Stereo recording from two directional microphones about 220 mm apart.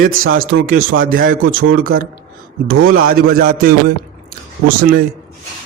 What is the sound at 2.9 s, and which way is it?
A man's voice, 40° right (ahead or behind).